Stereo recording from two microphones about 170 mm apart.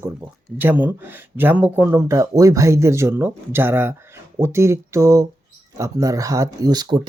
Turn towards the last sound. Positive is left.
turn(degrees=-25)  # may be behind; listen again after turning